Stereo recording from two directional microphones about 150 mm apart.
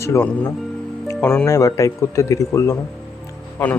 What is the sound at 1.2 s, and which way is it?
Speech, 5° left (ahead or behind).